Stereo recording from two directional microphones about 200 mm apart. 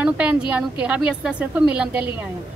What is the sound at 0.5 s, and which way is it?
A woman's voice, 5° right (ahead or behind).